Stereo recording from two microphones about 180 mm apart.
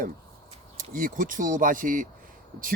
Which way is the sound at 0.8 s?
50° right (ahead or behind).